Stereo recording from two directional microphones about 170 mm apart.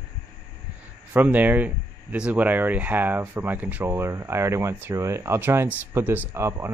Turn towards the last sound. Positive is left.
turn(degrees=-15)  # may be behind; listen again after turning